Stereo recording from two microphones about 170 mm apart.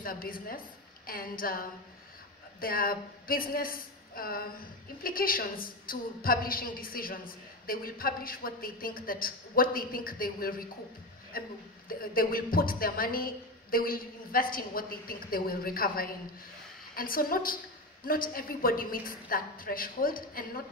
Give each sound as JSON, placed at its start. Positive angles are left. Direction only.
{"t": 0.0, "sound": "a woman's voice", "side_deg": 60}